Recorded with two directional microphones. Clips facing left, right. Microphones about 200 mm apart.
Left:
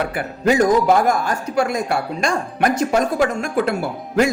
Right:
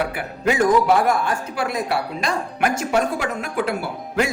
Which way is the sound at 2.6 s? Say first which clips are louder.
Left 3 dB; 35° left (ahead or behind).